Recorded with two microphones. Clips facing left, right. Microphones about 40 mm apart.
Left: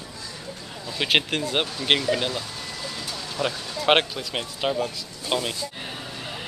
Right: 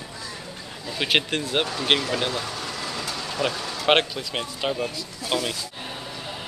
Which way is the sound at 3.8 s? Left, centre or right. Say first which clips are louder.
Even; centre.